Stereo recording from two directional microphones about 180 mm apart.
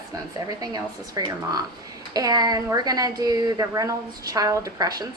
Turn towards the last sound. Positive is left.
turn(degrees=-20)  # may be behind; listen again after turning